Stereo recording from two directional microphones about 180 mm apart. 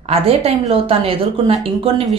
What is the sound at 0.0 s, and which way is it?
Speech, 35° right (ahead or behind).